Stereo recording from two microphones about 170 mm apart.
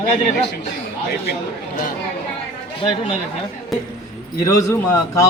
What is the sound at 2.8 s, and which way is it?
Speech, 35° left (ahead or behind).